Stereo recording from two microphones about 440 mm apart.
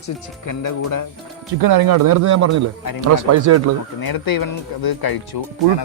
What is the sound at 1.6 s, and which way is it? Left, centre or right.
Speech, right.